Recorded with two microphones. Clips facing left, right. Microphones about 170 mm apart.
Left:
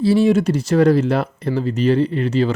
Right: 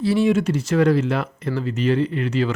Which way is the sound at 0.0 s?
30° left (ahead or behind).